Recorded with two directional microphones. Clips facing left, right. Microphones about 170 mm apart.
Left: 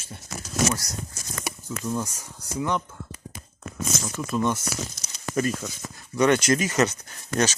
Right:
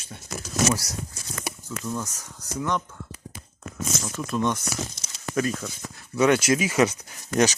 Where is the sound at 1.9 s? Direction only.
10° left (ahead or behind).